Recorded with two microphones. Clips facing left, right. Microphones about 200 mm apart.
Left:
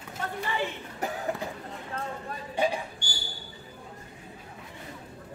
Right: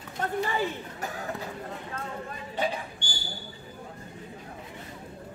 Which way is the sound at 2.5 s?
10° left (ahead or behind).